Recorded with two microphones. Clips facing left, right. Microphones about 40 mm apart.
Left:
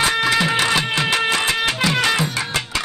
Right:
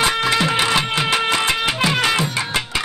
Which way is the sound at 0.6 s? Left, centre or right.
Centre.